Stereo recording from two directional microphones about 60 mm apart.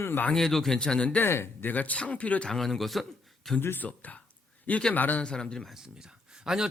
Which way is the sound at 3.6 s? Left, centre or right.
Left.